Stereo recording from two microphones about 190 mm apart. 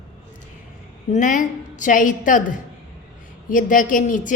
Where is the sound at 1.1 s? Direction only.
40° left (ahead or behind).